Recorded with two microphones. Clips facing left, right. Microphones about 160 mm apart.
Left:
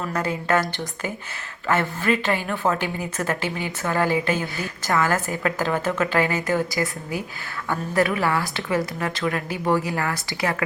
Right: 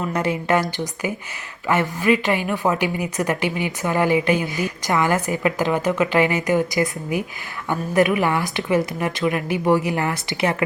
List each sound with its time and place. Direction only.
0.1 s a woman's voice: 20° right (ahead or behind)